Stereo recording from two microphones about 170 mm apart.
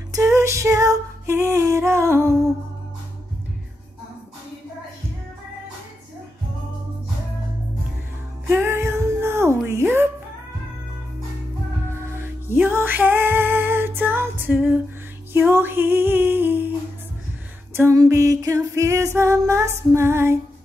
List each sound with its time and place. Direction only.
0.1 s music: 20° right (ahead or behind)
8.5 s music: 15° right (ahead or behind)
9.7 s a sound: 15° right (ahead or behind)
11.9 s music: 15° right (ahead or behind)
17.7 s music: 15° right (ahead or behind)